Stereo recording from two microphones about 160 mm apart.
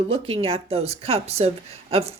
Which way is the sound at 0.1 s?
35° right (ahead or behind).